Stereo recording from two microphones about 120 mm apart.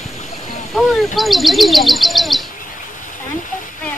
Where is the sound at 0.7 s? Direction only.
Centre (ahead or behind).